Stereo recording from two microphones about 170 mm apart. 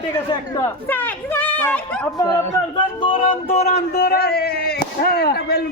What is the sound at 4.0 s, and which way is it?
Speech, 60° left (ahead or behind).